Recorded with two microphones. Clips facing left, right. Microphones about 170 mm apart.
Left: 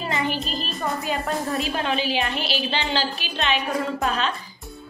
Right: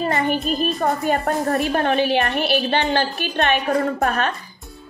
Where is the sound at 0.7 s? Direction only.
45° right (ahead or behind).